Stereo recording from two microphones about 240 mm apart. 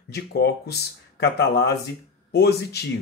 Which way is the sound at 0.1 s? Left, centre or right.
Left.